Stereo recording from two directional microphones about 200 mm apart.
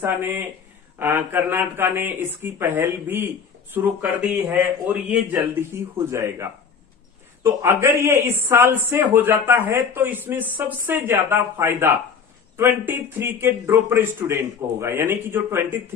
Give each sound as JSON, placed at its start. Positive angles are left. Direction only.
{"t": 0.0, "sound": "a man's voice", "side_deg": -10}